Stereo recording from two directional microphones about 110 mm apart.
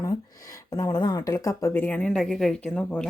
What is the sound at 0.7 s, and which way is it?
Speech, 35° left (ahead or behind).